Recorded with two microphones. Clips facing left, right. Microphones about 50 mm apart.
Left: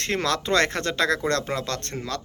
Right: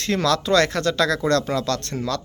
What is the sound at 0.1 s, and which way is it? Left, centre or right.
Speech, left.